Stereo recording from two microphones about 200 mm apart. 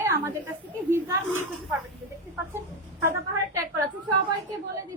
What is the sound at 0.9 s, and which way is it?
Speech, 10° right (ahead or behind).